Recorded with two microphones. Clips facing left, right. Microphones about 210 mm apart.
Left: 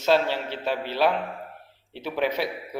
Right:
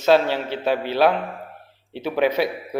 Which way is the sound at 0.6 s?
65° right (ahead or behind).